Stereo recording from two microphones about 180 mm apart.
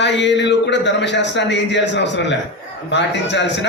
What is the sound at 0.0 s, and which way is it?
Speech, 80° left.